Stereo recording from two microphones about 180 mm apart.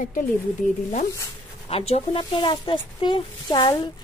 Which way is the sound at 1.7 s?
35° left (ahead or behind).